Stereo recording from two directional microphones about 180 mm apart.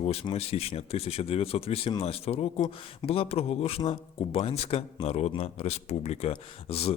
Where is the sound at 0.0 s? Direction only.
35° left (ahead or behind).